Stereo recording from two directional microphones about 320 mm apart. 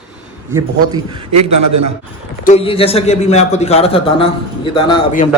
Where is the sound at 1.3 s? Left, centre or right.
Right.